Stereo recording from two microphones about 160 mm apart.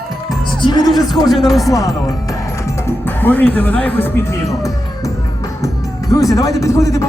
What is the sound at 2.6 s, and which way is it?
Music, 15° left (ahead or behind).